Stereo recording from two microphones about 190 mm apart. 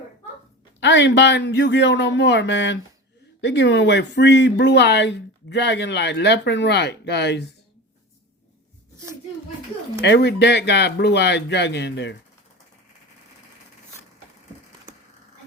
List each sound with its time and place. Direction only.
0.8 s a man's voice: 65° left (ahead or behind)
10.0 s speech: 65° left (ahead or behind)